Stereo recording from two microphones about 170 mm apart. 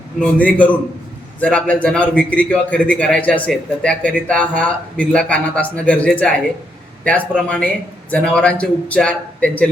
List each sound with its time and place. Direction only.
0.2 s a man's voice: 10° left (ahead or behind)
7.4 s a man's voice: 5° left (ahead or behind)